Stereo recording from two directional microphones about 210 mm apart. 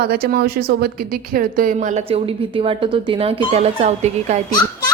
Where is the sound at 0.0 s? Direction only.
45° right (ahead or behind).